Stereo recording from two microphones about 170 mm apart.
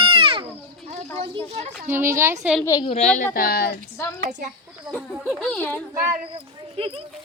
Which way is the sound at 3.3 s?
60° left (ahead or behind).